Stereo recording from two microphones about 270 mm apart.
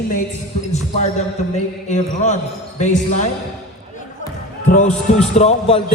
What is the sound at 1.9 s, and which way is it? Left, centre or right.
Speech, left.